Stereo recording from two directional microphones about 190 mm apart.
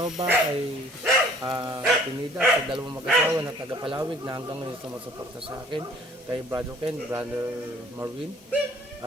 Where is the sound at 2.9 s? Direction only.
10° right (ahead or behind).